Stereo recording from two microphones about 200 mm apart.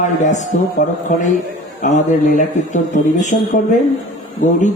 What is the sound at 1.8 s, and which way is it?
Speech, 35° left (ahead or behind).